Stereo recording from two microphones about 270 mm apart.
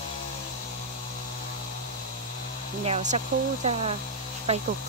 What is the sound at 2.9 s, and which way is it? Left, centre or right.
Speech, right.